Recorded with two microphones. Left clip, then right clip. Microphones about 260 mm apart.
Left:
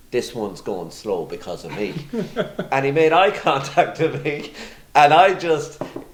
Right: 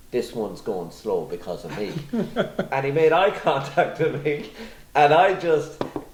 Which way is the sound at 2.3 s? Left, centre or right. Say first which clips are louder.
Right 1 dB; right.